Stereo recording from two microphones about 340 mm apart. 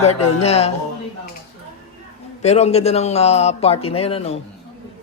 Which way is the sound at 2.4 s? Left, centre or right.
Centre.